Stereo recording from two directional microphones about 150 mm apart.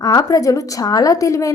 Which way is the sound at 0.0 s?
25° left (ahead or behind).